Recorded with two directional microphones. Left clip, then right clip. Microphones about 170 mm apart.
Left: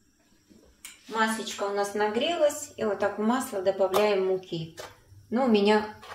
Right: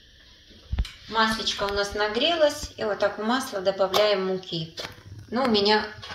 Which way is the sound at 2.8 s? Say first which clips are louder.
Right 2 dB; 45° left (ahead or behind).